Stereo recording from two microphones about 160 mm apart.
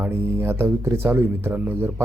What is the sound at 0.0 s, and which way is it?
A man's voice, 15° right (ahead or behind).